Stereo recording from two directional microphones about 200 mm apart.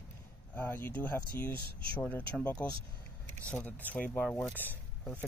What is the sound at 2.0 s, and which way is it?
Speech, 10° left (ahead or behind).